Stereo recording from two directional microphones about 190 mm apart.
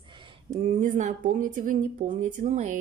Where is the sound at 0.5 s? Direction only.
40° right (ahead or behind).